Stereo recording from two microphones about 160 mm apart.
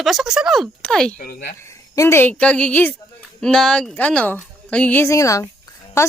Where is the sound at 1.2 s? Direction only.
70° left (ahead or behind).